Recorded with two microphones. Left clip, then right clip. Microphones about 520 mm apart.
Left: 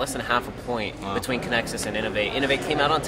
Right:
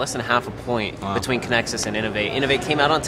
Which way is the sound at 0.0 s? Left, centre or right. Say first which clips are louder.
Right 3 dB; right.